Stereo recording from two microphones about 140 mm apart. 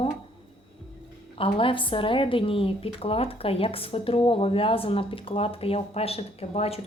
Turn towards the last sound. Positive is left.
turn(degrees=45)  # may be behind; listen again after turning